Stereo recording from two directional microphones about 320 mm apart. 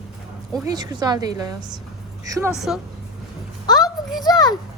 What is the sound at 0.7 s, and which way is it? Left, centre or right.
A woman's voice, centre.